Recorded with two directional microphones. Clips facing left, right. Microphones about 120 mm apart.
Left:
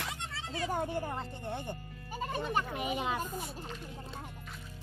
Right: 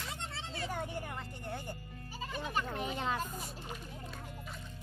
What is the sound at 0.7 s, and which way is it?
Speech, 35° left (ahead or behind).